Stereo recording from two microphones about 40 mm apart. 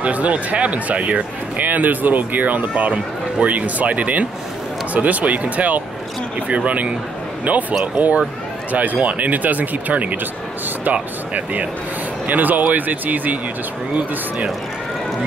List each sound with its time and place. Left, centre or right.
0.0 s speech: right
2.7 s speech: right